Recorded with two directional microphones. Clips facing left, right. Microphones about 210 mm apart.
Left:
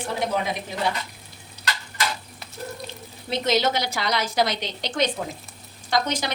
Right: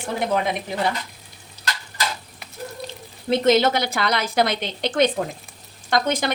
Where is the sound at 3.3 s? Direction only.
55° right (ahead or behind).